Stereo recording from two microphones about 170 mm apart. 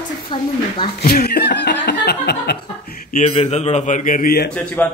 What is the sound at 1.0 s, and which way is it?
Laughter, 65° left (ahead or behind).